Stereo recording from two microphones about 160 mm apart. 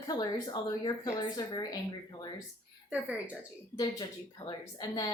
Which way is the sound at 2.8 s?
10° right (ahead or behind).